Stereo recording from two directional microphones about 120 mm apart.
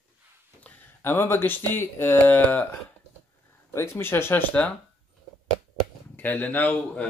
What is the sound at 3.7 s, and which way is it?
Speech, 20° left (ahead or behind).